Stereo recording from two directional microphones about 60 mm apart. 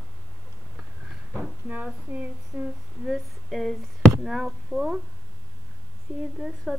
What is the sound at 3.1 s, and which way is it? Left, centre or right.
Speech, centre.